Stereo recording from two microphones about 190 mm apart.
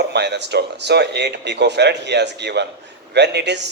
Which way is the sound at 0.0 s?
65° right (ahead or behind).